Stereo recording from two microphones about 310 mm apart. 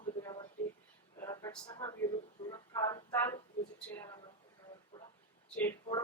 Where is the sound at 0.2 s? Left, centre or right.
Centre.